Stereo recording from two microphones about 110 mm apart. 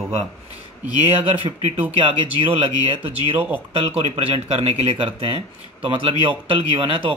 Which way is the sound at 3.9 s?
75° right (ahead or behind).